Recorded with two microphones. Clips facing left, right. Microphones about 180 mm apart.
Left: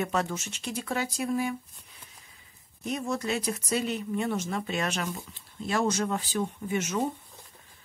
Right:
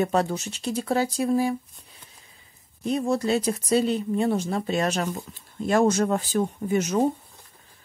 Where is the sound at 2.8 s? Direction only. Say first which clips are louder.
Right 7 dB; 30° right (ahead or behind).